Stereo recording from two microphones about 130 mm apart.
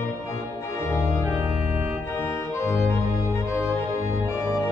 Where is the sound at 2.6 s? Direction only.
20° left (ahead or behind).